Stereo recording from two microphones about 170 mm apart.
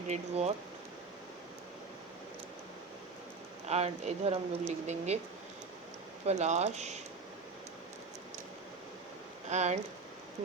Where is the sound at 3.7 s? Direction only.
40° right (ahead or behind).